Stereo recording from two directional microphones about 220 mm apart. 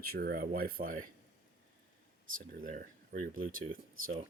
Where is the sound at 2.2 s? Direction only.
40° right (ahead or behind).